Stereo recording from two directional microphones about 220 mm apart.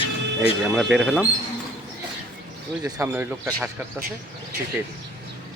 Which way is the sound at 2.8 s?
15° right (ahead or behind).